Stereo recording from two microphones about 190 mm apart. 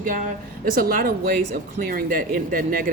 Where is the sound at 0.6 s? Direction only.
50° right (ahead or behind).